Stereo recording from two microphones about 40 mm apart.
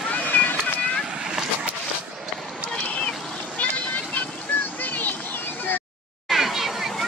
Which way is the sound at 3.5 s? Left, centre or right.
Left.